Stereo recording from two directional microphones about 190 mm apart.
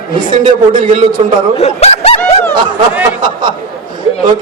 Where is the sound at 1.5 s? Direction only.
35° left (ahead or behind).